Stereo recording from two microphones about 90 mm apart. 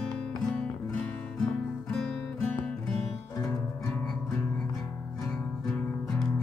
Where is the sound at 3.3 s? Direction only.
35° left (ahead or behind).